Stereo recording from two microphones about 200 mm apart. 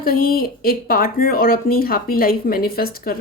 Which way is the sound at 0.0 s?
45° left (ahead or behind).